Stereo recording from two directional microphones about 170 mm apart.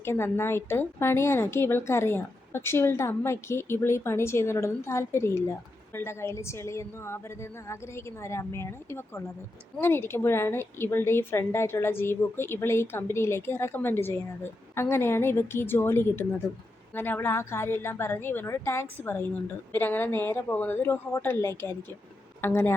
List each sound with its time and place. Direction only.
0.0 s a woman's voice: 15° left (ahead or behind)